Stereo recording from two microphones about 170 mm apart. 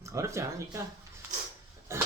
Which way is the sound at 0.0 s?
15° right (ahead or behind).